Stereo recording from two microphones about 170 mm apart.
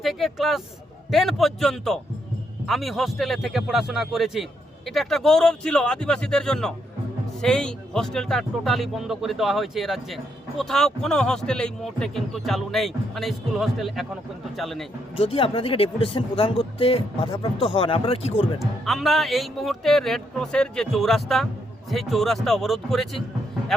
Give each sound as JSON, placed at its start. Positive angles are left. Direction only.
{"t": 0.0, "sound": "speech", "side_deg": 0}
{"t": 15.1, "sound": "speech", "side_deg": 35}
{"t": 18.6, "sound": "speech", "side_deg": 0}